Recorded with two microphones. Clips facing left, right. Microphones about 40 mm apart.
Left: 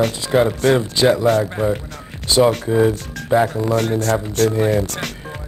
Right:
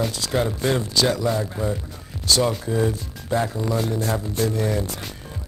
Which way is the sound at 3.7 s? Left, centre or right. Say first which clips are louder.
Left 6 dB; left.